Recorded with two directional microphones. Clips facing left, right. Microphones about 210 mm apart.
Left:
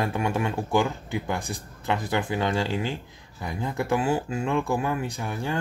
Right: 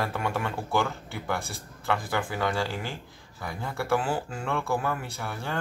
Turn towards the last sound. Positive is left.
turn(degrees=15)  # may be behind; listen again after turning